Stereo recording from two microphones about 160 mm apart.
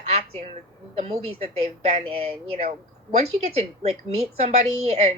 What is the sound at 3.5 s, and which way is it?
A woman's voice, 40° right (ahead or behind).